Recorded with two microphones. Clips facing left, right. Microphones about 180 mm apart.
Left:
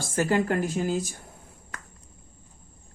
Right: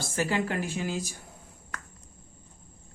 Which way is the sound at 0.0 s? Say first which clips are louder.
Left 4 dB; 45° left (ahead or behind).